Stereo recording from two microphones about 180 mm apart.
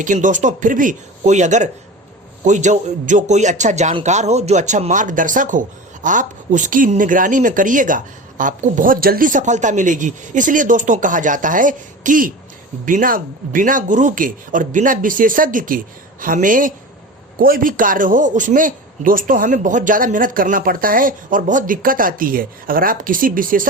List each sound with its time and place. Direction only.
0.0 s a man's voice: 45° right (ahead or behind)